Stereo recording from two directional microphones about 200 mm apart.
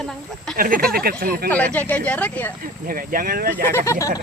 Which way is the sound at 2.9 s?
45° right (ahead or behind).